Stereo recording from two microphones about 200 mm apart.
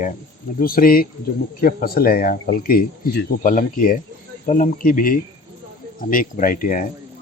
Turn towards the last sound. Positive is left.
turn(degrees=40)  # may be behind; listen again after turning